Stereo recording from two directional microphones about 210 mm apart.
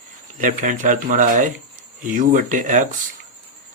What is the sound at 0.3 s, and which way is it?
Speech, 40° right (ahead or behind).